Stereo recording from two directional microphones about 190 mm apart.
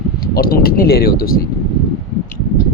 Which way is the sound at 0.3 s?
50° left (ahead or behind).